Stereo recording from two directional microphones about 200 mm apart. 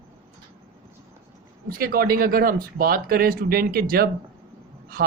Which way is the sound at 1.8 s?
45° right (ahead or behind).